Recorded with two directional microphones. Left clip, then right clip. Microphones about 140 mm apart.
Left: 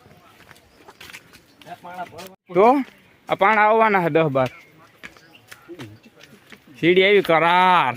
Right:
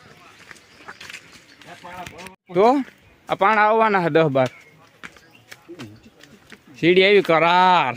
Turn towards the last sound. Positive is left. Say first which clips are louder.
# even
turn(degrees=0)  # may be behind; listen again after turning